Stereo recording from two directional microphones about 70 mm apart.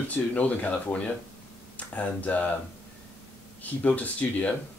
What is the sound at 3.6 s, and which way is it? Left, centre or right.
Speech, left.